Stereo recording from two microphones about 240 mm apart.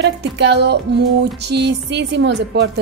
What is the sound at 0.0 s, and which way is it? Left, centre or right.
Speech, right.